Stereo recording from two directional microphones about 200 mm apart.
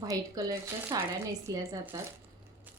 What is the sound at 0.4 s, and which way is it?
Speech, 15° right (ahead or behind).